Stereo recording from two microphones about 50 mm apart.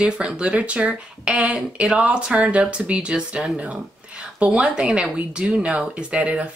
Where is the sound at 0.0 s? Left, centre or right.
Right.